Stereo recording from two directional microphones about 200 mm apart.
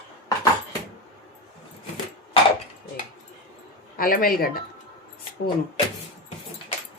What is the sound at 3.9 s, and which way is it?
Speech, 45° left (ahead or behind).